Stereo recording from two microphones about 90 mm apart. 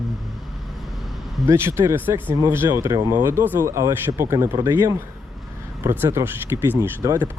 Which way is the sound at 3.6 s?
35° right (ahead or behind).